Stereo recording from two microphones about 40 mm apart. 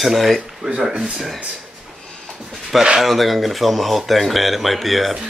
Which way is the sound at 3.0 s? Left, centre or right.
Centre.